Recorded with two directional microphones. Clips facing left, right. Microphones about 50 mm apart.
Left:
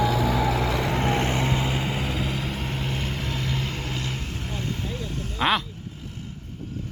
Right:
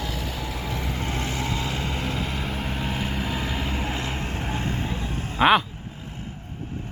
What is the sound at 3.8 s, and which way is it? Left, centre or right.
Vehicle, right.